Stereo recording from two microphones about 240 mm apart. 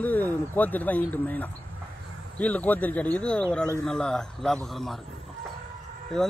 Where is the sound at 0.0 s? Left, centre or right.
Centre.